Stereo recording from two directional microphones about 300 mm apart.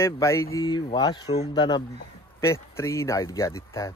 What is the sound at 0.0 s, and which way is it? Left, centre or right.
Speech, centre.